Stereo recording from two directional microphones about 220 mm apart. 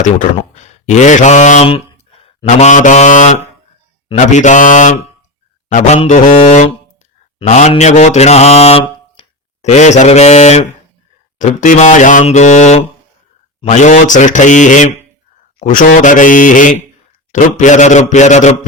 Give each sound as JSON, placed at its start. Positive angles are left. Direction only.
{"t": 0.0, "sound": "mantra", "side_deg": 35}
{"t": 2.2, "sound": "speech", "side_deg": 30}
{"t": 4.1, "sound": "mantra", "side_deg": 35}